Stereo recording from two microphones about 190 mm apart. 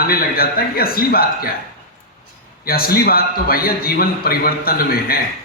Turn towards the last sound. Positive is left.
turn(degrees=50)  # may be behind; listen again after turning